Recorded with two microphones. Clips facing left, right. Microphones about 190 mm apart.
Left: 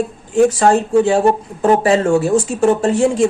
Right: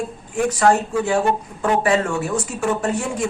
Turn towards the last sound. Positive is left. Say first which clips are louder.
# left 9 dB
turn(degrees=25)  # may be behind; listen again after turning